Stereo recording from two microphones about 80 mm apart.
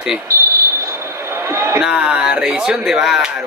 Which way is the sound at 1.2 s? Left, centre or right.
Right.